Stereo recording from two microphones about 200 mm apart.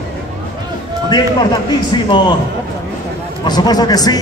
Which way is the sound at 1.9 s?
20° left (ahead or behind).